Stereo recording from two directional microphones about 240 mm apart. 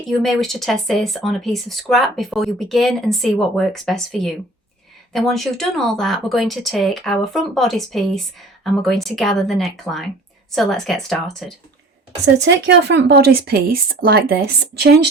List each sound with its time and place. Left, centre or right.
0.1 s speech: centre
12.2 s speech: right